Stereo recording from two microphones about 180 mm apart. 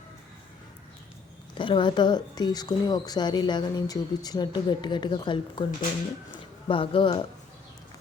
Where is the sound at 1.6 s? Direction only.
25° left (ahead or behind).